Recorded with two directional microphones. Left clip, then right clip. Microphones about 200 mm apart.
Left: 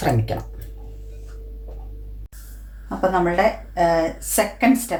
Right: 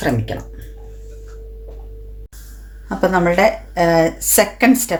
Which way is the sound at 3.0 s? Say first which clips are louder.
Right 4 dB; 55° right (ahead or behind).